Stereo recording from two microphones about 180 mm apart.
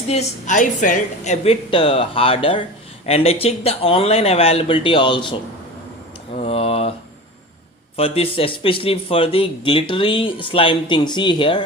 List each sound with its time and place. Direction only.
0.1 s a woman's voice: 40° left (ahead or behind)
7.9 s speech: 30° left (ahead or behind)